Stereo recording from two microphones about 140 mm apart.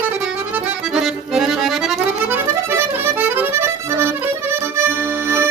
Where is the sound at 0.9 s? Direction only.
5° right (ahead or behind).